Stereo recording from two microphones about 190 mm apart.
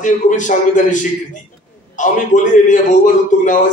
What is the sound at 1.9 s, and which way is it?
A man's voice, 40° left (ahead or behind).